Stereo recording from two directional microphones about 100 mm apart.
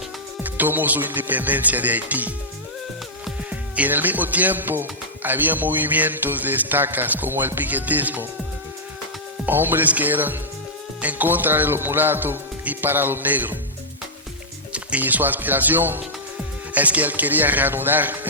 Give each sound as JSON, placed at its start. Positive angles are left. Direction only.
{"t": 0.4, "sound": "speech", "side_deg": -15}
{"t": 3.5, "sound": "speech", "side_deg": -15}
{"t": 9.5, "sound": "speech", "side_deg": -20}
{"t": 14.7, "sound": "speech", "side_deg": -15}